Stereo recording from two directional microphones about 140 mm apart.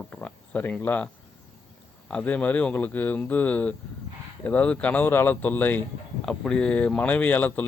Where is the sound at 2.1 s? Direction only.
10° left (ahead or behind).